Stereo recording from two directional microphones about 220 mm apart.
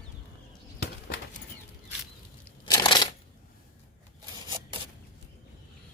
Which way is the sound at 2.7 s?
20° left (ahead or behind).